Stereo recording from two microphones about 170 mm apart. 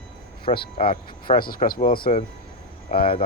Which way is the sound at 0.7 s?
35° left (ahead or behind).